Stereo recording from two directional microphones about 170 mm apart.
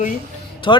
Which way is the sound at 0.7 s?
30° left (ahead or behind).